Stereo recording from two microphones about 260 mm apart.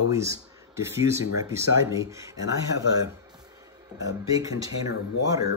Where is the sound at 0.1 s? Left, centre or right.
Centre.